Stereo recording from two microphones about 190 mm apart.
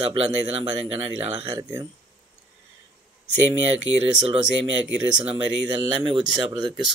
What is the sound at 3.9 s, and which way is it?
Speech, 90° right.